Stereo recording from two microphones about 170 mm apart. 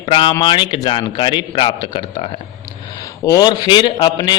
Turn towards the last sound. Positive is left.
turn(degrees=25)  # may be behind; listen again after turning